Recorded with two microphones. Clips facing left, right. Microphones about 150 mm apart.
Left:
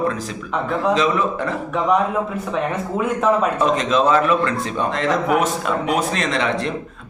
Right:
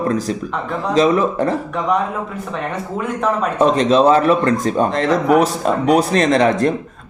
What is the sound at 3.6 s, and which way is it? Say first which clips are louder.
A man's voice: right 5 dB; 35° right (ahead or behind).